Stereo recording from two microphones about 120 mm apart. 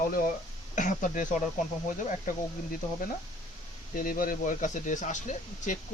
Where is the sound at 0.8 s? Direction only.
90° left.